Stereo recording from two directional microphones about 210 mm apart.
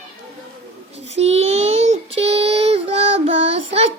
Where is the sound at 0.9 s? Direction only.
30° right (ahead or behind).